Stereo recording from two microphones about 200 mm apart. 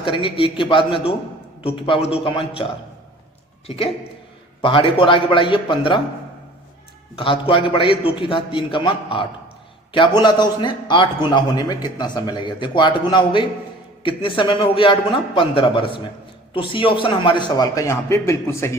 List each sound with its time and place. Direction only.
0.0 s a man's voice: 25° left (ahead or behind)
4.6 s a man's voice: 25° left (ahead or behind)
7.2 s a man's voice: 25° left (ahead or behind)